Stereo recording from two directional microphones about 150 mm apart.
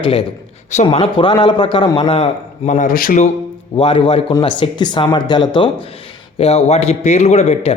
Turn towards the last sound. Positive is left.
turn(degrees=45)  # may be behind; listen again after turning